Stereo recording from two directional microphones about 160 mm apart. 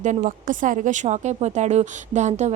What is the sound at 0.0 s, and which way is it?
Speech, 50° right (ahead or behind).